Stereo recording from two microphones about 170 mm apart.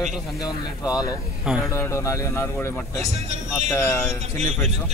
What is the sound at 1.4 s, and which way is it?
Speech, 5° right (ahead or behind).